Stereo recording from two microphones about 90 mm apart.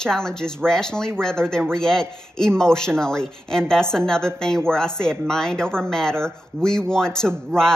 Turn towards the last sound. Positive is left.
turn(degrees=5)  # may be behind; listen again after turning